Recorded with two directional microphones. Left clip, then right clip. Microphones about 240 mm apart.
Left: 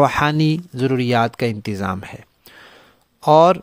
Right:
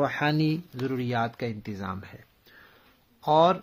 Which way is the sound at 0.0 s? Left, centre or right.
Left.